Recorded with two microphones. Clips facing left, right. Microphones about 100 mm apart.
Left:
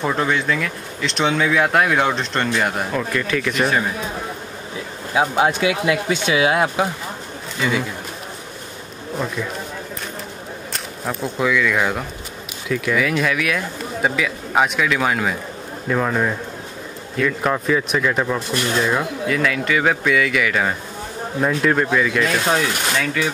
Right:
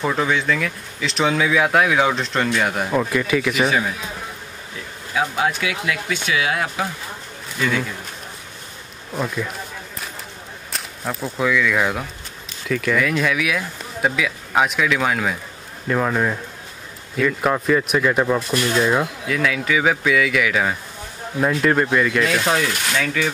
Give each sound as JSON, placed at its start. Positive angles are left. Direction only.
{"t": 0.0, "sound": "speech", "side_deg": 0}
{"t": 2.9, "sound": "speech", "side_deg": -10}
{"t": 5.1, "sound": "speech", "side_deg": 25}
{"t": 10.7, "sound": "speech", "side_deg": 0}